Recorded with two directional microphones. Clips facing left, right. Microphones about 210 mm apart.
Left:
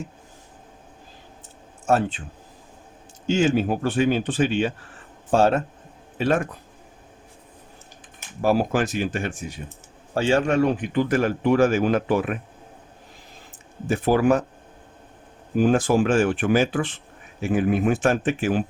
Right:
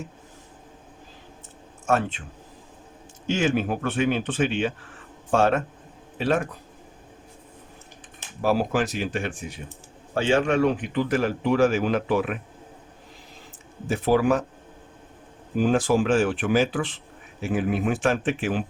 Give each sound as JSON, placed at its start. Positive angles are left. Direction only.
{"t": 1.9, "sound": "speech", "side_deg": 35}
{"t": 3.2, "sound": "speech", "side_deg": 30}
{"t": 8.4, "sound": "speech", "side_deg": 45}
{"t": 13.9, "sound": "speech", "side_deg": 50}
{"t": 15.6, "sound": "speech", "side_deg": 45}